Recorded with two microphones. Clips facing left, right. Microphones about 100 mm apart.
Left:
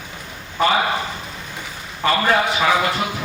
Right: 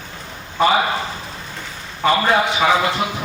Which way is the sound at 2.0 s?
15° right (ahead or behind).